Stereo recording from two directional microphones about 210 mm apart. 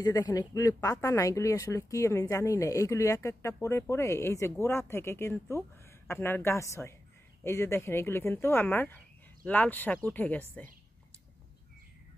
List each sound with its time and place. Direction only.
0.0 s speech: 20° left (ahead or behind)